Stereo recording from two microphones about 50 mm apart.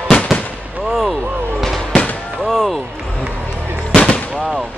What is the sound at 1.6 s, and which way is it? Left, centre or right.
Fireworks, centre.